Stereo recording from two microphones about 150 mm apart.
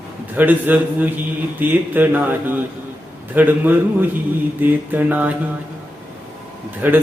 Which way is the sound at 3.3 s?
10° right (ahead or behind).